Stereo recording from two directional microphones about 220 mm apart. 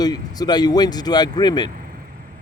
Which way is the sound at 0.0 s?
20° left (ahead or behind).